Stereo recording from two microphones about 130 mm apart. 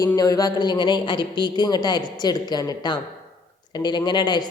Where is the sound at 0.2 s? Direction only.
30° left (ahead or behind).